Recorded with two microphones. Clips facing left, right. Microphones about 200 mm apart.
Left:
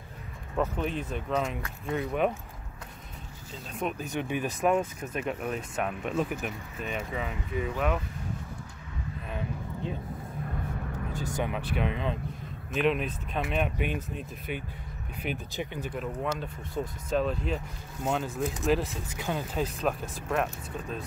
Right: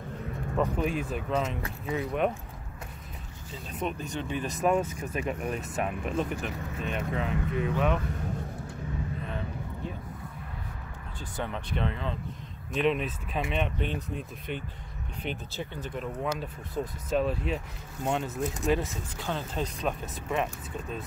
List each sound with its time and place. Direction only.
0.7 s speech: 10° right (ahead or behind)
3.8 s speech: 10° left (ahead or behind)
11.3 s speech: 10° left (ahead or behind)
12.7 s speech: centre (ahead or behind)
16.3 s speech: 5° right (ahead or behind)